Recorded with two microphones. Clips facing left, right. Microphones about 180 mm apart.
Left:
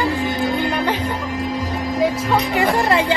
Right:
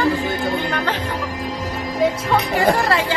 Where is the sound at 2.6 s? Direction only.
20° left (ahead or behind).